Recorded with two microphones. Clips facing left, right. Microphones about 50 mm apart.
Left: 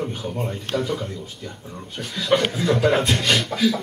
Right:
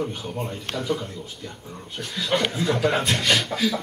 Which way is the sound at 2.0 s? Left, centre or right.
Centre.